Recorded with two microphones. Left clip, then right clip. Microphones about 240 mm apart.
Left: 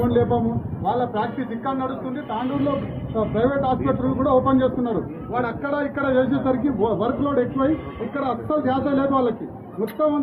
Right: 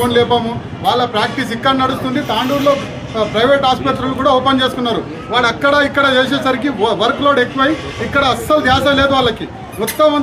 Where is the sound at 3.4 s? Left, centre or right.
Right.